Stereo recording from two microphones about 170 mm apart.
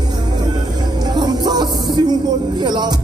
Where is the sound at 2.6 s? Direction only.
25° right (ahead or behind).